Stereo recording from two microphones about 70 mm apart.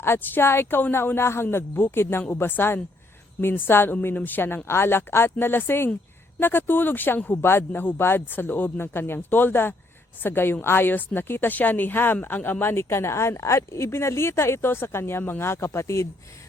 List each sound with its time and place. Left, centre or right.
0.0 s a woman's voice: left